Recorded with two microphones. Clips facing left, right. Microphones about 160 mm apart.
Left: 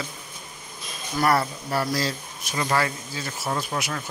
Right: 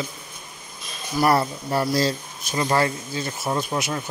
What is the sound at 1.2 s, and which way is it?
Speech, 25° right (ahead or behind).